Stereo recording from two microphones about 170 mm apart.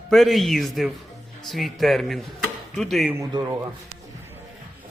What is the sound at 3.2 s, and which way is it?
Speech, 20° right (ahead or behind).